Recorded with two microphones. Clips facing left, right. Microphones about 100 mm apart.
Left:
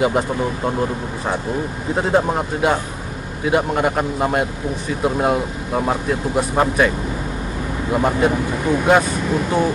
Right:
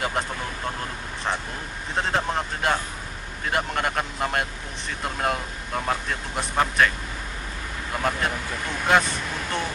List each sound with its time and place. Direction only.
0.0 s speech: 10° left (ahead or behind)
7.9 s speech: 10° left (ahead or behind)